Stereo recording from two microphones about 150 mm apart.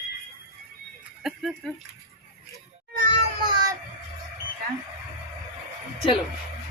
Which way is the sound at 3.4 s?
30° right (ahead or behind).